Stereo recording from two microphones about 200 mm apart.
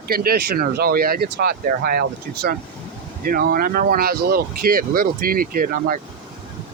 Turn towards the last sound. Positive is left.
turn(degrees=-45)  # may be behind; listen again after turning